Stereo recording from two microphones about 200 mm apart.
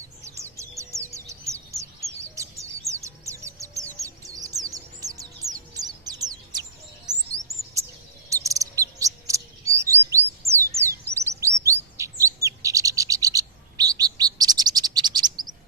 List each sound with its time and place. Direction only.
0.3 s bird: 15° right (ahead or behind)
4.0 s music: 15° right (ahead or behind)
5.7 s bird: 20° right (ahead or behind)
7.3 s chirp: 15° right (ahead or behind)
8.3 s cricket: 15° right (ahead or behind)
9.7 s chirp: 15° right (ahead or behind)
10.4 s a sound: 15° right (ahead or behind)
11.1 s chirp: 15° right (ahead or behind)